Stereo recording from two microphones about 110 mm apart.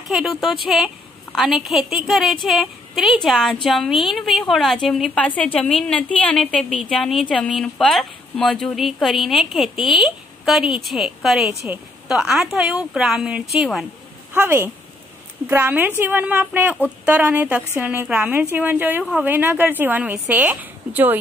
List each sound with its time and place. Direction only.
0.1 s speech: centre (ahead or behind)
5.1 s a woman's voice: 10° left (ahead or behind)
6.8 s speech: centre (ahead or behind)
14.3 s a woman's voice: 20° right (ahead or behind)